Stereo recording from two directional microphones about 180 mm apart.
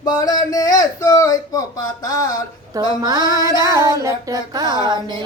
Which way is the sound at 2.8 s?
20° right (ahead or behind).